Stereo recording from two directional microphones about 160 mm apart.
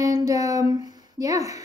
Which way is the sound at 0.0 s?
20° right (ahead or behind).